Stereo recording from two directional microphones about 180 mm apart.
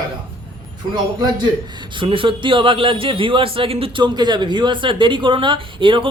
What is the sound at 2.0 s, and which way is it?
A man's voice, 30° right (ahead or behind).